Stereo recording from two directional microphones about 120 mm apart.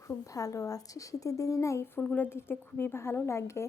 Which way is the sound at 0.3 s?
30° left (ahead or behind).